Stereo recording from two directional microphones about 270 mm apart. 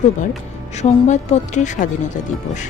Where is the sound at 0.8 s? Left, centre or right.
Left.